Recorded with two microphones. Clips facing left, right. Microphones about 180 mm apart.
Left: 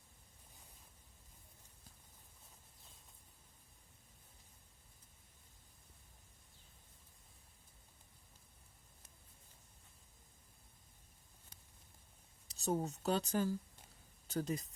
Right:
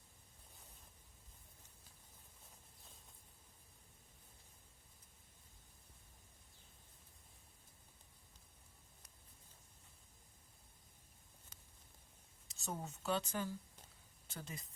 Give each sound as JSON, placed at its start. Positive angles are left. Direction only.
{"t": 12.5, "sound": "speech", "side_deg": 35}